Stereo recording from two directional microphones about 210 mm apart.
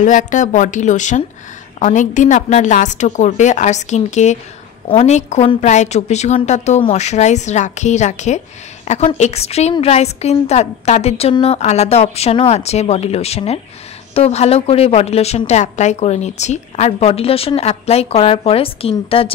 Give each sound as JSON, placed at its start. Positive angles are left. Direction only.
{"t": 0.0, "sound": "a woman's voice", "side_deg": 35}